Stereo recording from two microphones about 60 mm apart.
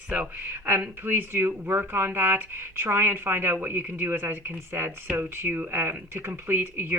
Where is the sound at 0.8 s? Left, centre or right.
Right.